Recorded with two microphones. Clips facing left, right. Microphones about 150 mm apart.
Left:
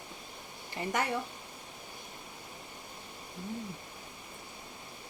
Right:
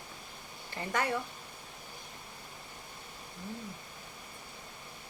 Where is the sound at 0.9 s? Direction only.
20° left (ahead or behind).